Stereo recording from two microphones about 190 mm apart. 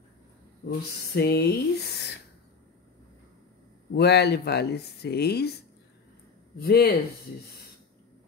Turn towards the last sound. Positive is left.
turn(degrees=55)  # may be behind; listen again after turning